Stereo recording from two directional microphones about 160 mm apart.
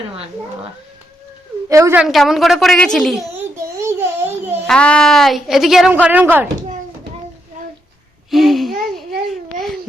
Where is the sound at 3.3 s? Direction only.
15° right (ahead or behind).